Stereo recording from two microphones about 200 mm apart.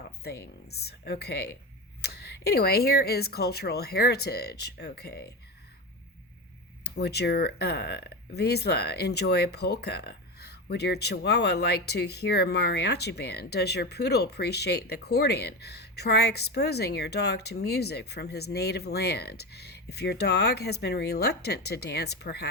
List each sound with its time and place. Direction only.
0.2 s speech: 55° left (ahead or behind)
6.8 s speech: 55° left (ahead or behind)